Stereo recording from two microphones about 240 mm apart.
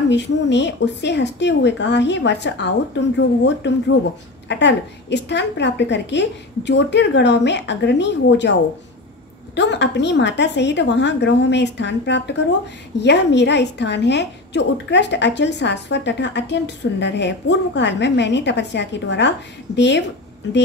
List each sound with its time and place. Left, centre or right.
0.1 s a woman's voice: left
9.6 s a woman's voice: left